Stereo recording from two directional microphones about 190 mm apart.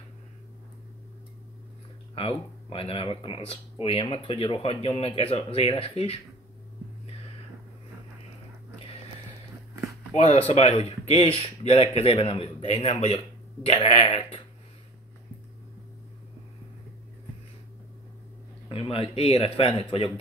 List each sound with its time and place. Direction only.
2.1 s speech: 30° left (ahead or behind)
10.1 s speech: 35° left (ahead or behind)
18.7 s speech: 30° left (ahead or behind)